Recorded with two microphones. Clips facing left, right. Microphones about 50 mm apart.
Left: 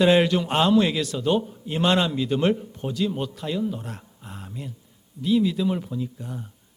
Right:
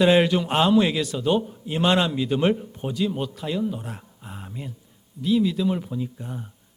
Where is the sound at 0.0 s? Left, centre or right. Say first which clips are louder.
Even; centre.